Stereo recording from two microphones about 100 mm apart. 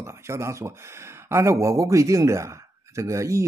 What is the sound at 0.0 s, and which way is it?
Speech, 30° right (ahead or behind).